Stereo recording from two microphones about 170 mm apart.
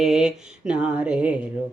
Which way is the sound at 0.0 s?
5° right (ahead or behind).